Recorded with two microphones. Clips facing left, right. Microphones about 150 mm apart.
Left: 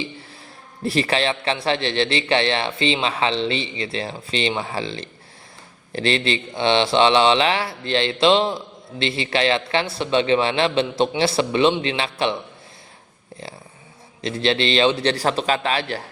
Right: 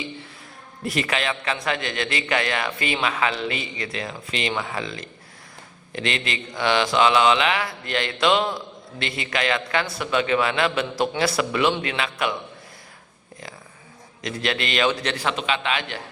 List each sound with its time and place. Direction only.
0.9 s speech: 30° left (ahead or behind)
13.3 s a sound: 30° left (ahead or behind)
14.2 s a man's voice: 30° left (ahead or behind)